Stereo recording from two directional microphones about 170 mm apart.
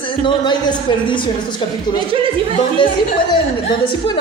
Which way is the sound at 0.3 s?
25° left (ahead or behind).